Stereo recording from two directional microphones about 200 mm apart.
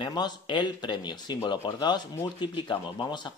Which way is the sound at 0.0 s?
20° left (ahead or behind).